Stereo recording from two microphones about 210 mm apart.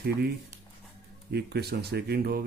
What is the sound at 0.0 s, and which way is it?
Speech, 50° right (ahead or behind).